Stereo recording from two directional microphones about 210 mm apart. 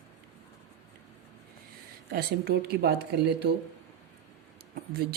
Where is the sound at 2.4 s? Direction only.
50° right (ahead or behind).